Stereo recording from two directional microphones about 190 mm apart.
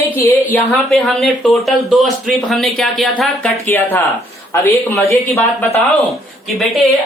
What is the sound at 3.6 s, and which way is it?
Speech, 10° left (ahead or behind).